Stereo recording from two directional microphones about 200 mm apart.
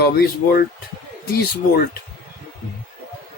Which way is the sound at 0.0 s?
50° left (ahead or behind).